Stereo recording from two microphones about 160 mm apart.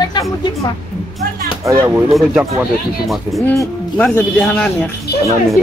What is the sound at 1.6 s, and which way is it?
Speech, 20° right (ahead or behind).